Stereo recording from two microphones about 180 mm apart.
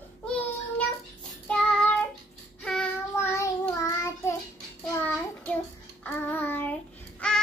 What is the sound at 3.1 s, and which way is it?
Child singing, 15° left (ahead or behind).